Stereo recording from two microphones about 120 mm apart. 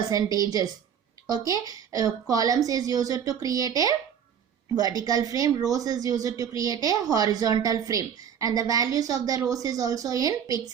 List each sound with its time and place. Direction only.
0.1 s a woman's voice: 30° right (ahead or behind)